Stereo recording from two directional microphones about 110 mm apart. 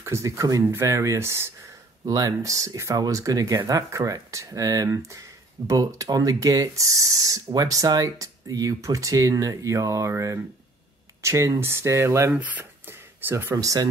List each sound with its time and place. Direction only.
0.0 s speech: 25° right (ahead or behind)
13.6 s speech: 30° right (ahead or behind)